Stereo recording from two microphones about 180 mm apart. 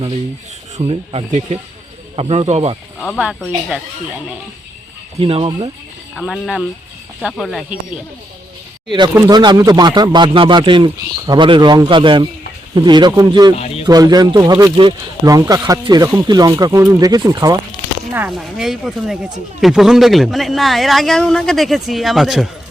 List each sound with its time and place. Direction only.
0.8 s speech: 30° right (ahead or behind)
3.2 s a man's voice: 5° right (ahead or behind)
5.2 s speech: 30° right (ahead or behind)
6.1 s a man's voice: centre (ahead or behind)
9.1 s speech: 20° right (ahead or behind)
13.6 s a sound: 35° left (ahead or behind)
13.8 s speech: 20° right (ahead or behind)
18.1 s a man's voice: 5° right (ahead or behind)